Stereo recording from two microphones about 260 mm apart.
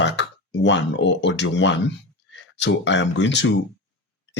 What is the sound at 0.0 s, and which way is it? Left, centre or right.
Speech, left.